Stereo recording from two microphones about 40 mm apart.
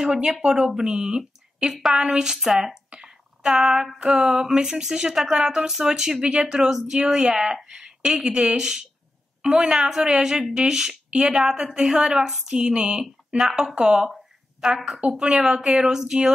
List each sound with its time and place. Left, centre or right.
0.0 s a woman's voice: centre
3.0 s a sound: centre
4.2 s a woman's voice: centre
9.8 s speech: centre
14.9 s a woman's voice: right
15.8 s speech: centre